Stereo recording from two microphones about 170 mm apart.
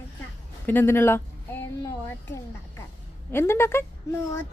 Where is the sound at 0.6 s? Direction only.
10° left (ahead or behind).